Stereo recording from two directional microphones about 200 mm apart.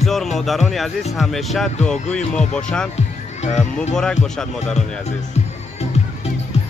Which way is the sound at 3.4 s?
35° left (ahead or behind).